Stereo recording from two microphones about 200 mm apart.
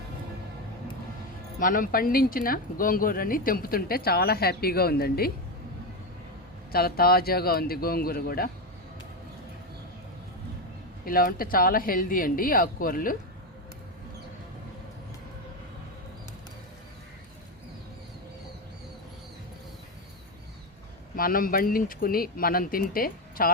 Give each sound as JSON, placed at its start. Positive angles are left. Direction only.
{"t": 1.5, "sound": "speech", "side_deg": 45}
{"t": 6.7, "sound": "speech", "side_deg": 50}
{"t": 11.0, "sound": "speech", "side_deg": 45}
{"t": 21.2, "sound": "speech", "side_deg": 45}